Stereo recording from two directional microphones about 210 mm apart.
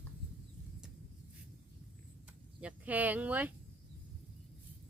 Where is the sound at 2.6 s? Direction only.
10° right (ahead or behind).